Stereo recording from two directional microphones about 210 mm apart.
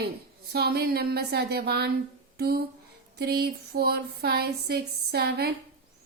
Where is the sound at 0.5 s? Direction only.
50° right (ahead or behind).